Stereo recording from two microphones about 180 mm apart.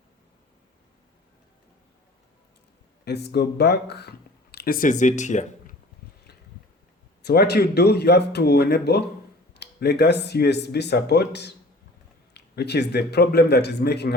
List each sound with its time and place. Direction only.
3.0 s speech: 65° left (ahead or behind)
4.5 s speech: 55° left (ahead or behind)
7.2 s speech: 65° left (ahead or behind)